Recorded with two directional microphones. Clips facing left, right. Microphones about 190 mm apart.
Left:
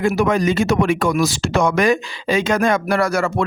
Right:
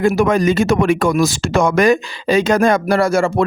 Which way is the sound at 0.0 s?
45° right (ahead or behind).